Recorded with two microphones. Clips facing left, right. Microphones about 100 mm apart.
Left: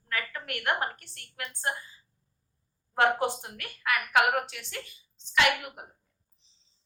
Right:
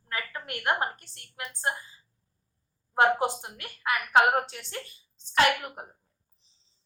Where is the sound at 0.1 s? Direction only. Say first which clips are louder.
Left 1 dB; 25° right (ahead or behind).